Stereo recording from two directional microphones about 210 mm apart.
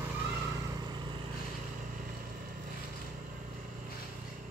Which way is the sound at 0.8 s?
20° right (ahead or behind).